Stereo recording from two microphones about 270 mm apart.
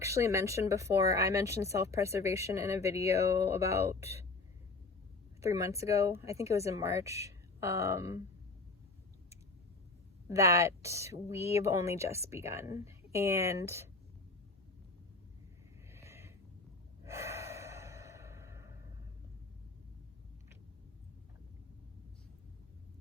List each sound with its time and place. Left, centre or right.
0.0 s speech: centre
5.4 s speech: centre
10.2 s speech: centre
15.9 s a sound: centre
17.1 s sigh: centre